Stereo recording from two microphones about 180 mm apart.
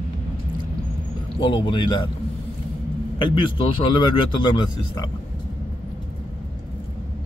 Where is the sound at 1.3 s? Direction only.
30° left (ahead or behind).